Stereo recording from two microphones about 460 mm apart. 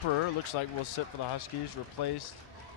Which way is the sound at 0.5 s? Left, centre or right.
Left.